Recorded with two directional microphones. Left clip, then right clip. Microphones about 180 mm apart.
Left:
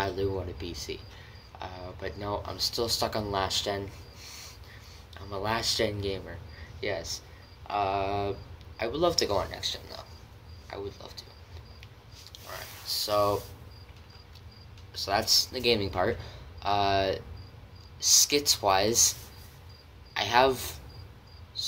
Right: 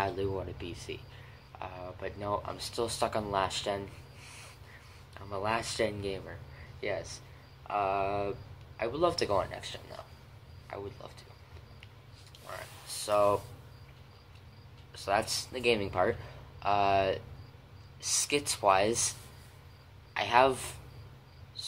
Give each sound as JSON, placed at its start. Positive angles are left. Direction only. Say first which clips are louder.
{"t": 0.0, "sound": "speech", "louder": "left 2 dB", "side_deg": 0}
{"t": 5.1, "sound": "speech", "louder": "left 1 dB", "side_deg": 5}
{"t": 13.0, "sound": "speech", "louder": "even", "side_deg": 0}
{"t": 15.0, "sound": "speech", "louder": "left 5 dB", "side_deg": -5}
{"t": 20.2, "sound": "speech", "louder": "left 2 dB", "side_deg": 0}